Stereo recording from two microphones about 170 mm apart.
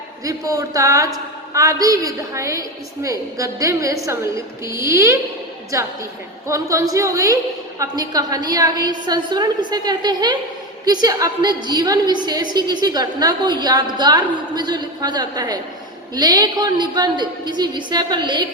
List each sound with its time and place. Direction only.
0.3 s a woman's voice: 20° right (ahead or behind)